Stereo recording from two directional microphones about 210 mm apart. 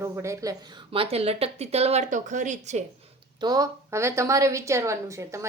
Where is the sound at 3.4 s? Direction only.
15° right (ahead or behind).